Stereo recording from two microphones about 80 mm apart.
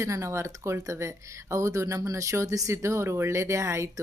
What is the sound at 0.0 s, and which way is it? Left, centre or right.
Speech, right.